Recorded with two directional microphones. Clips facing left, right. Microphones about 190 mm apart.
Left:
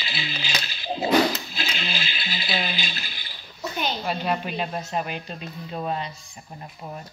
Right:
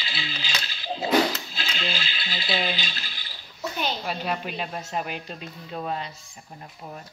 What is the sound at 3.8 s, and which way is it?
A woman's voice, centre (ahead or behind).